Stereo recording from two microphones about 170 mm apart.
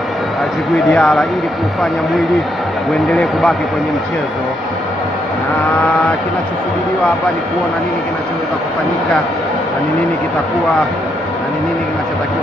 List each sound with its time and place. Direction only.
0.8 s speech: centre (ahead or behind)
3.1 s speech: centre (ahead or behind)